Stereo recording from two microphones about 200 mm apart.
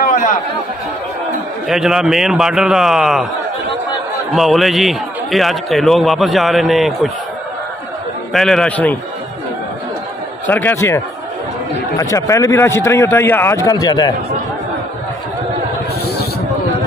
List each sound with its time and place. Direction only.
0.1 s chatter: 40° left (ahead or behind)
1.7 s a man's voice: centre (ahead or behind)
4.3 s a man's voice: centre (ahead or behind)
8.3 s a man's voice: centre (ahead or behind)
10.4 s a man's voice: 10° left (ahead or behind)
12.0 s a man's voice: 15° left (ahead or behind)